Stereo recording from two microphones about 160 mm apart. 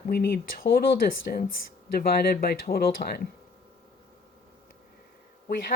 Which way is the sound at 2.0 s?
70° left (ahead or behind).